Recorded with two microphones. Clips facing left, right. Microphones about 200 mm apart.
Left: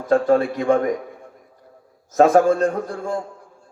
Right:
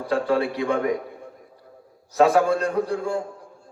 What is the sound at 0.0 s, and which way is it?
Speech, 45° left (ahead or behind).